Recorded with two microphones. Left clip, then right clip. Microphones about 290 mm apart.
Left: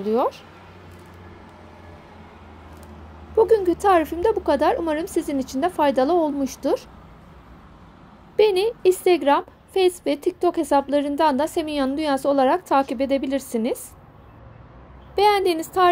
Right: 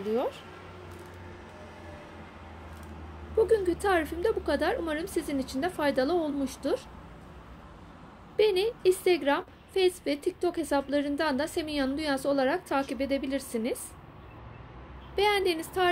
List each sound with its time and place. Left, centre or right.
0.1 s a woman's voice: centre
3.3 s a woman's voice: left
8.4 s a woman's voice: left
15.1 s a woman's voice: left